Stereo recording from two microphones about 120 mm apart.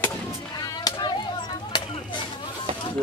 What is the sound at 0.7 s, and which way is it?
Chop, 35° left (ahead or behind).